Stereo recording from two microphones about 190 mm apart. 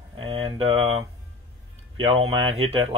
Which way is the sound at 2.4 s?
30° right (ahead or behind).